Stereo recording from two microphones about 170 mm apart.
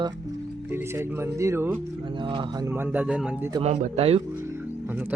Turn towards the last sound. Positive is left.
turn(degrees=-10)  # may be behind; listen again after turning